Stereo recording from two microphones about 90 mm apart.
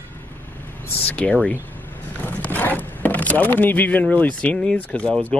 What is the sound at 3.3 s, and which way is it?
Speech, 20° left (ahead or behind).